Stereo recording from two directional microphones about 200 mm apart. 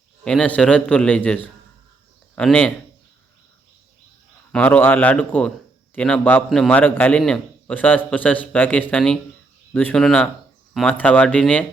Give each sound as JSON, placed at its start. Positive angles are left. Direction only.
{"t": 0.3, "sound": "a man's voice", "side_deg": 5}
{"t": 4.5, "sound": "a man's voice", "side_deg": 5}